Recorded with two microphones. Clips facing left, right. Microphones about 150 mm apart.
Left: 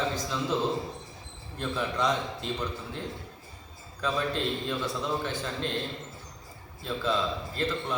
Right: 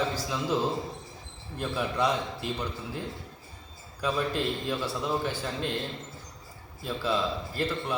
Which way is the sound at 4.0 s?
10° right (ahead or behind).